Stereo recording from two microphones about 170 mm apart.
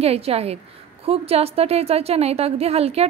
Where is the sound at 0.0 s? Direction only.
35° right (ahead or behind).